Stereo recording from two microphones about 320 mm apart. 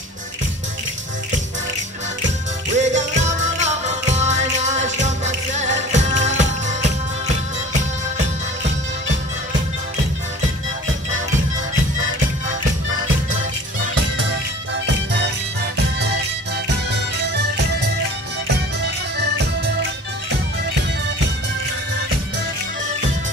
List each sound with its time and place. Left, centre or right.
2.7 s music: right
19.1 s music: right